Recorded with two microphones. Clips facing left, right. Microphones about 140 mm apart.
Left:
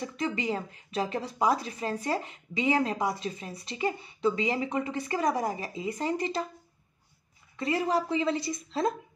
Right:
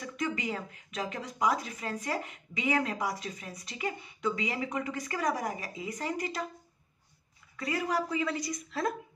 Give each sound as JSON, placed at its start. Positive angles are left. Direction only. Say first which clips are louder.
{"t": 0.0, "sound": "a woman's voice", "louder": "left 3 dB", "side_deg": 30}
{"t": 7.5, "sound": "a woman's voice", "louder": "left 4 dB", "side_deg": 25}